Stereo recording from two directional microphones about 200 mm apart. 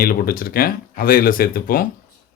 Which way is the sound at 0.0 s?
45° left (ahead or behind).